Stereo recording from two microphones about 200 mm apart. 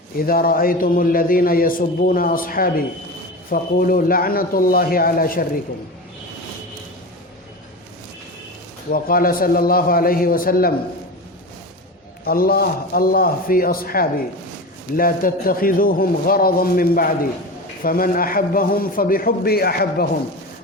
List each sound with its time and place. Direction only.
0.2 s a man's voice: 45° left (ahead or behind)
8.9 s a man's voice: 45° left (ahead or behind)
12.2 s a man's voice: 50° left (ahead or behind)